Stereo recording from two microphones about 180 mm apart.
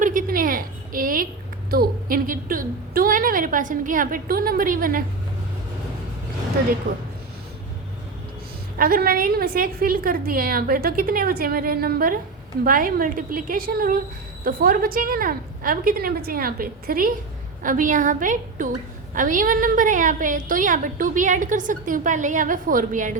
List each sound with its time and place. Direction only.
0.0 s a sound: 50° right (ahead or behind)
1.7 s a woman's voice: 55° right (ahead or behind)
6.9 s a man's voice: 70° right (ahead or behind)
8.8 s a woman's voice: 55° right (ahead or behind)